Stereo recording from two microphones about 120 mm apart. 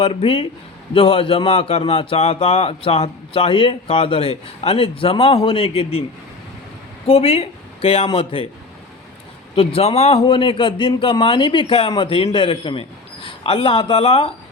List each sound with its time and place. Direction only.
0.0 s speech: 45° left (ahead or behind)
7.1 s speech: 55° left (ahead or behind)
9.6 s speech: 55° left (ahead or behind)